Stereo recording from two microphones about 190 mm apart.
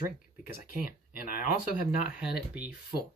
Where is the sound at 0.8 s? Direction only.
45° left (ahead or behind).